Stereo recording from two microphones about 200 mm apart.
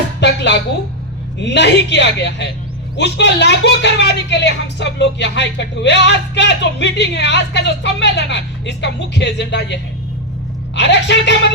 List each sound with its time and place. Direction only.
0.2 s music: 60° left (ahead or behind)
1.4 s speech: 60° left (ahead or behind)
10.8 s speech: 60° left (ahead or behind)